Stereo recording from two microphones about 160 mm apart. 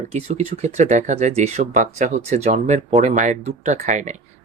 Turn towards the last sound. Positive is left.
turn(degrees=-50)  # may be behind; listen again after turning